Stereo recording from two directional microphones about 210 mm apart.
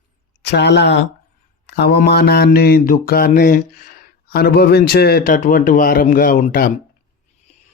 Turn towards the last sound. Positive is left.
turn(degrees=40)  # may be behind; listen again after turning